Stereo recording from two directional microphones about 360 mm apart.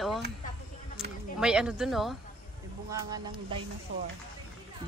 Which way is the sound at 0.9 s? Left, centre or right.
Centre.